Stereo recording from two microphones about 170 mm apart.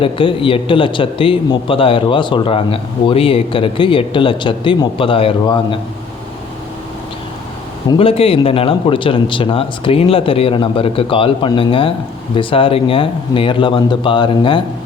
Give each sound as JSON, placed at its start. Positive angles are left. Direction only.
{"t": 0.0, "sound": "speech", "side_deg": 30}
{"t": 7.9, "sound": "speech", "side_deg": 35}